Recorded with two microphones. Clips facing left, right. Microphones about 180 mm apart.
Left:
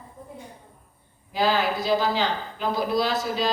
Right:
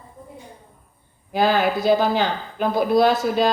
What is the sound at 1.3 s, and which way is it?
A woman's voice, 55° right (ahead or behind).